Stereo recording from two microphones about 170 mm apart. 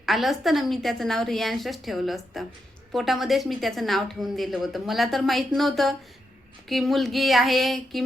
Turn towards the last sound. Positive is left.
turn(degrees=0)  # may be behind; listen again after turning